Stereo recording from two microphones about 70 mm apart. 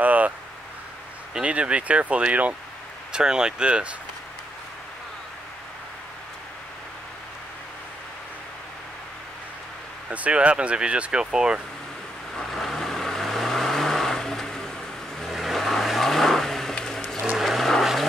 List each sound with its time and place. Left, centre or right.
0.0 s a sound: right
1.3 s speech: centre
10.0 s speech: centre
12.4 s vehicle: centre
17.2 s vehicle: centre